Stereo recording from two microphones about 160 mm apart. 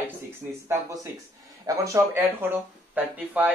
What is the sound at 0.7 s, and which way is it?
Speech, 15° right (ahead or behind).